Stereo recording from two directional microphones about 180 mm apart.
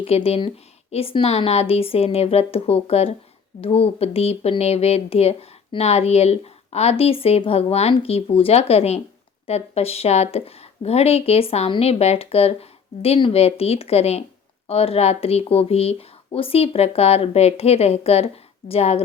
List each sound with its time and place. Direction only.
0.0 s speech: 35° left (ahead or behind)